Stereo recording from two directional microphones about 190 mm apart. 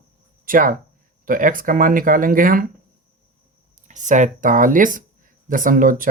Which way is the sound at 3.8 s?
40° right (ahead or behind).